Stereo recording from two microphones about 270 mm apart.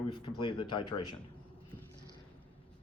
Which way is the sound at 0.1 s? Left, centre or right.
Centre.